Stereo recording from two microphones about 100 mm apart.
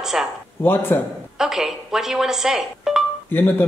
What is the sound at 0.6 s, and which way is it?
Speech, 20° left (ahead or behind).